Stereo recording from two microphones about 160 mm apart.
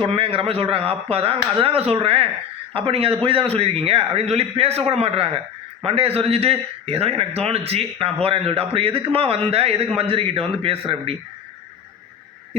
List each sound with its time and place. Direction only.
0.0 s a man's voice: 35° right (ahead or behind)